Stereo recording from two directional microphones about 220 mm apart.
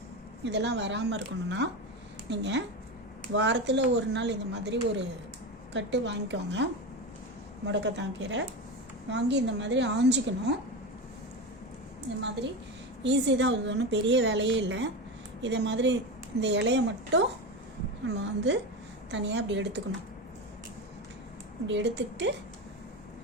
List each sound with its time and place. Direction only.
0.4 s a woman's voice: 50° right (ahead or behind)
7.7 s a woman's voice: 55° right (ahead or behind)
13.0 s a woman's voice: 55° right (ahead or behind)
21.7 s a woman's voice: 50° right (ahead or behind)